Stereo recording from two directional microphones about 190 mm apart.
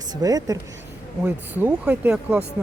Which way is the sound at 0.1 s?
20° right (ahead or behind).